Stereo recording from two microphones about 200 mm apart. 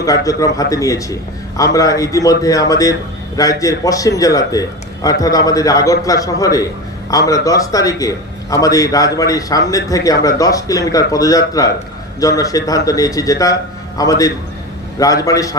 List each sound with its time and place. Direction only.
0.0 s a man's voice: 15° left (ahead or behind)